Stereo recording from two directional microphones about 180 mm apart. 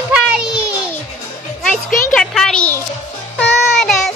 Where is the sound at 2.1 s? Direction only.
5° left (ahead or behind).